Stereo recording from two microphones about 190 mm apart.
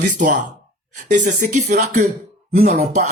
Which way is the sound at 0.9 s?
40° right (ahead or behind).